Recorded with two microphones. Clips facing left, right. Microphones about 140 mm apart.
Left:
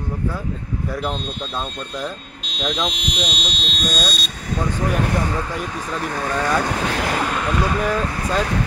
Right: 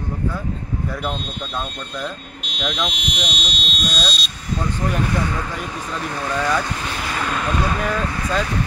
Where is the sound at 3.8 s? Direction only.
50° left (ahead or behind).